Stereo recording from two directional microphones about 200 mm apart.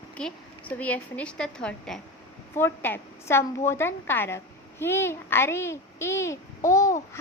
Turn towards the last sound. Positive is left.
turn(degrees=15)  # may be behind; listen again after turning